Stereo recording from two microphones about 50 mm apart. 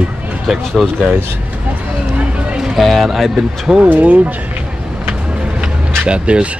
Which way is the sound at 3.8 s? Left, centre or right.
Right.